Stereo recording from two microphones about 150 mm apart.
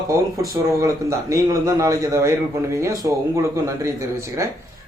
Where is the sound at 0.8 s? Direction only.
20° right (ahead or behind).